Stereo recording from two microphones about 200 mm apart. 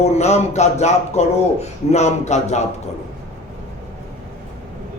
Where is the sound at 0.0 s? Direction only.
35° left (ahead or behind).